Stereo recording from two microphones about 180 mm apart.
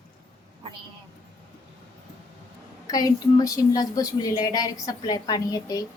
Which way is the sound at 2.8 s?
20° left (ahead or behind).